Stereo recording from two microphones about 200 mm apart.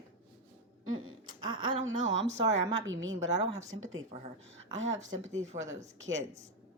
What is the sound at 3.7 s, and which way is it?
Speech, 85° right.